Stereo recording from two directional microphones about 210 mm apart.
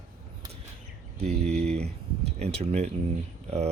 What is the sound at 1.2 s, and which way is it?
Speech, 30° right (ahead or behind).